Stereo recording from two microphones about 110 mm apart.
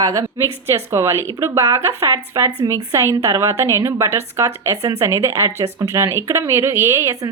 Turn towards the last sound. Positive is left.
turn(degrees=-25)  # may be behind; listen again after turning